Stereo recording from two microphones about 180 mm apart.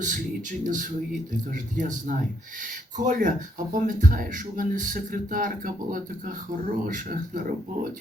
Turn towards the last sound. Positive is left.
turn(degrees=-50)  # may be behind; listen again after turning